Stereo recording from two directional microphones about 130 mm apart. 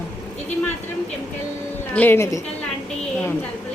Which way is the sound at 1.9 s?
15° left (ahead or behind).